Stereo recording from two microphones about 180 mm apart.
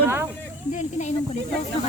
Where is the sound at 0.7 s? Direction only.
40° left (ahead or behind).